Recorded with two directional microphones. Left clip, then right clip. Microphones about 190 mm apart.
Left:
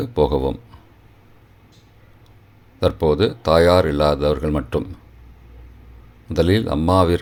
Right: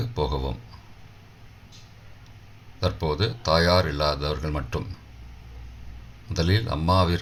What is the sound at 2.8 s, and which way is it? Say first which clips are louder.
Speech: left 9 dB; 45° left (ahead or behind).